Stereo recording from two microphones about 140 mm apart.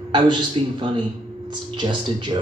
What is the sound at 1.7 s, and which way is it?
Speech, 35° right (ahead or behind).